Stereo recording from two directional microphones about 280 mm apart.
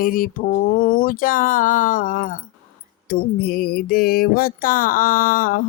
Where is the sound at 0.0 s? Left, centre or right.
Left.